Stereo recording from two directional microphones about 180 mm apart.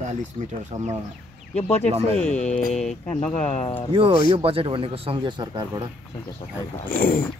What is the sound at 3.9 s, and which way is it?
Speech, 30° right (ahead or behind).